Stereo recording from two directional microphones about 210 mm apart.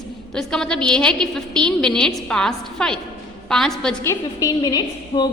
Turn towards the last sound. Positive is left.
turn(degrees=20)  # may be behind; listen again after turning